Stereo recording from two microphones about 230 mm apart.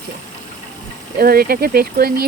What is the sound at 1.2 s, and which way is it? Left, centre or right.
Speech, right.